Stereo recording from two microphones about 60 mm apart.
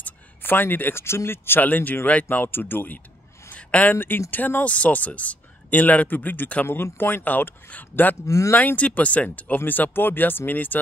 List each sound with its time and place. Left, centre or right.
0.0 s speech: left
3.5 s a sound: left
3.9 s speech: left
8.3 s speech: left
8.5 s speech: left